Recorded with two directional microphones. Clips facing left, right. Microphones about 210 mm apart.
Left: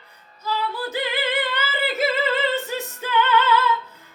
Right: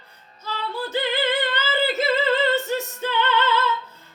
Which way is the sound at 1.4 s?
10° left (ahead or behind).